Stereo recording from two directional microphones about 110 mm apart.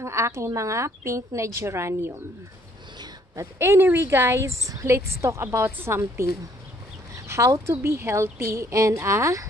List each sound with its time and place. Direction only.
0.0 s a woman's voice: 25° right (ahead or behind)
3.5 s a woman's voice: 20° right (ahead or behind)